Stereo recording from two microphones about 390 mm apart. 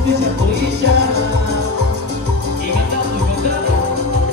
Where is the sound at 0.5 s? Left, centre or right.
Right.